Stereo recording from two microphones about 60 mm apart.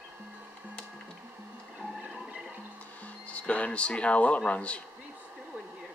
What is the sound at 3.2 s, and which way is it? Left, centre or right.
Speech, left.